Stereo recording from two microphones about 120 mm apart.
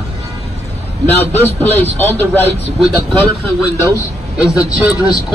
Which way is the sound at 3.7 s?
20° left (ahead or behind).